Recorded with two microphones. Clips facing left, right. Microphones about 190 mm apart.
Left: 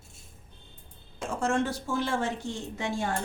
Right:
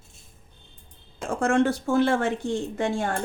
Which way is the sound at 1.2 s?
60° right (ahead or behind).